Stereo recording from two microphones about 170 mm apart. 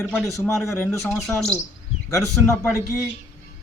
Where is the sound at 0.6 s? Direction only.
15° left (ahead or behind).